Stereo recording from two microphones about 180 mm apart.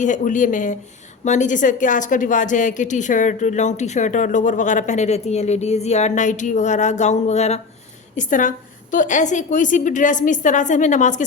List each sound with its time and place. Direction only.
0.0 s a woman's voice: 45° left (ahead or behind)